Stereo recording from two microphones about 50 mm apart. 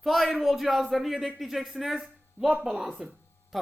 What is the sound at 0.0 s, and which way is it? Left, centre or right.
A woman's voice, centre.